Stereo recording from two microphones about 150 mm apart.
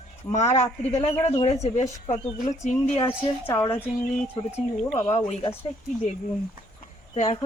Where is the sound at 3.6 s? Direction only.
20° left (ahead or behind).